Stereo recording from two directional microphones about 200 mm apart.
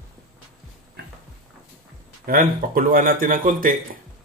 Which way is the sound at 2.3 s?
45° right (ahead or behind).